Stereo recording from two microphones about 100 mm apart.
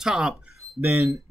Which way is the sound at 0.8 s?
20° right (ahead or behind).